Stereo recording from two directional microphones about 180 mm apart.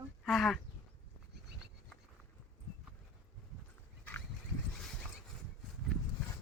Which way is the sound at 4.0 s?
10° left (ahead or behind).